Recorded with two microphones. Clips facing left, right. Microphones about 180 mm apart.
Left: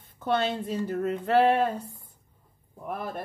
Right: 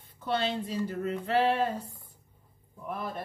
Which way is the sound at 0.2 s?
50° left (ahead or behind).